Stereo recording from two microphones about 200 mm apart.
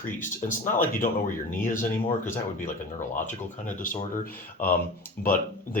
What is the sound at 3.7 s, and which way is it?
Speech, 40° left (ahead or behind).